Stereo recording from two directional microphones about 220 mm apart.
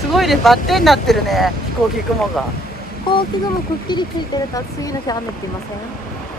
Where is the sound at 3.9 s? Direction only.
20° left (ahead or behind).